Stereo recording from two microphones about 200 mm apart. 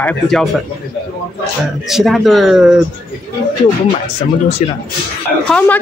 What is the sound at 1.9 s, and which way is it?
Speech, centre (ahead or behind).